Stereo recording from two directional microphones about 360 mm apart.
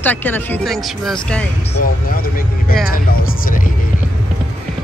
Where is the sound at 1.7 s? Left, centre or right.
Left.